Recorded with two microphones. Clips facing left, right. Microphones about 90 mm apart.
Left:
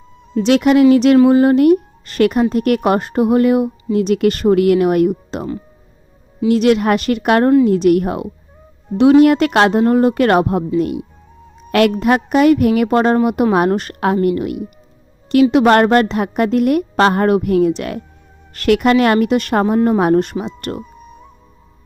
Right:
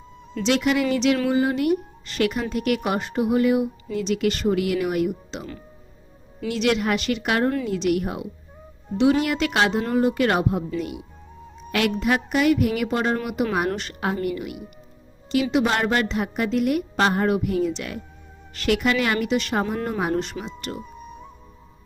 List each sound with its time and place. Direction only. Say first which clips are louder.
0.4 s speech: left 10 dB; 55° left (ahead or behind)
6.5 s speech: left 9 dB; 50° left (ahead or behind)
11.7 s a woman's voice: left 9 dB; 55° left (ahead or behind)
20.8 s music: even; centre (ahead or behind)